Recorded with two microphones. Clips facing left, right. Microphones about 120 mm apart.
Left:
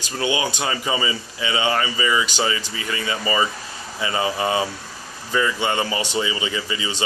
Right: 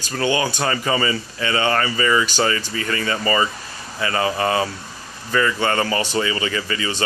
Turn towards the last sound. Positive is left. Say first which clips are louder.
# right 2 dB
turn(degrees=15)  # may be behind; listen again after turning